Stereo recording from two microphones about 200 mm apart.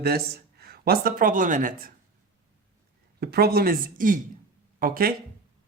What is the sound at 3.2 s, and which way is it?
Speech, 50° right (ahead or behind).